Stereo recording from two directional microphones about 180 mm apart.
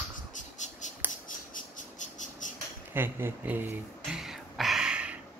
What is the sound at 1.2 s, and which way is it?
Cricket, 45° left (ahead or behind).